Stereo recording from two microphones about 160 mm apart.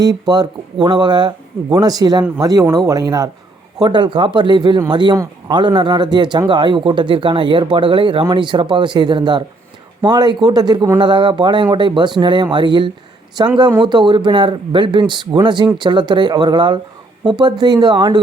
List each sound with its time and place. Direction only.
0.0 s speech: 25° right (ahead or behind)